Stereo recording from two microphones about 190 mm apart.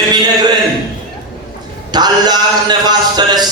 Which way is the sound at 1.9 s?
20° right (ahead or behind).